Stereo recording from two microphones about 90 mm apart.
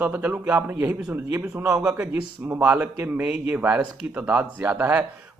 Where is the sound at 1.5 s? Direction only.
35° right (ahead or behind).